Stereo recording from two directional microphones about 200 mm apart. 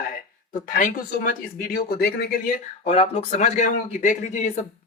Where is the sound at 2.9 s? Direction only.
30° left (ahead or behind).